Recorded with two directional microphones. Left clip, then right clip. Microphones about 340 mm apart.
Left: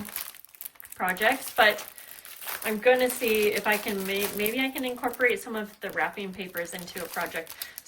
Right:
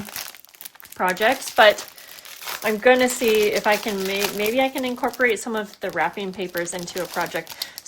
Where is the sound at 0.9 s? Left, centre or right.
Centre.